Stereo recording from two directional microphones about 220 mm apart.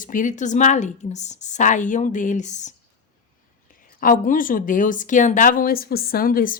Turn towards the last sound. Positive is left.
turn(degrees=40)  # may be behind; listen again after turning